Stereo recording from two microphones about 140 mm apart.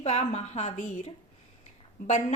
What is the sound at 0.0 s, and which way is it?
A woman's voice, 50° left (ahead or behind).